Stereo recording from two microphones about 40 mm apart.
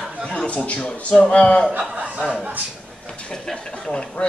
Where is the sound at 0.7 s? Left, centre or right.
Left.